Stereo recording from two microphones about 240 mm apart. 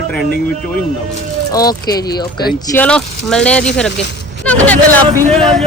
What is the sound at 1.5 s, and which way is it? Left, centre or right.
Speech, centre.